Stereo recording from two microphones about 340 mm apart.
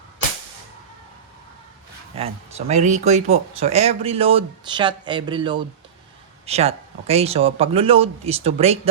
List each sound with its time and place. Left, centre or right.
2.1 s speech: centre